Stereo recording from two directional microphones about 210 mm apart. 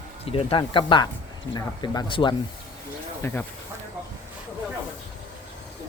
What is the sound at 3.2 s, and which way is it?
Speech, 10° left (ahead or behind).